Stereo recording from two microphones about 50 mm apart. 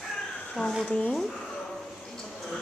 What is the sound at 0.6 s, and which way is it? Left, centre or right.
Speech, left.